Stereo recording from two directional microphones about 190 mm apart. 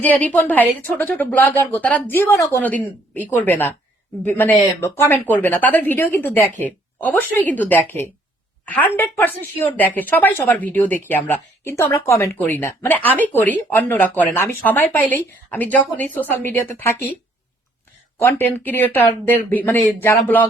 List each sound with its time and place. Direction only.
0.0 s a woman's voice: 10° left (ahead or behind)
18.2 s a woman's voice: 10° left (ahead or behind)